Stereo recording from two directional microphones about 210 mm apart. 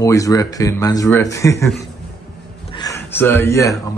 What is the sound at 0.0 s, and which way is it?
Speech, 15° left (ahead or behind).